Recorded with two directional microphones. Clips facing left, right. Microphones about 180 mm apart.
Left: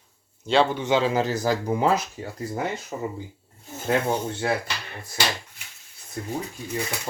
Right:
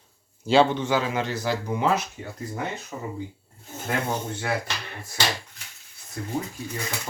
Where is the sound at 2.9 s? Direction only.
30° left (ahead or behind).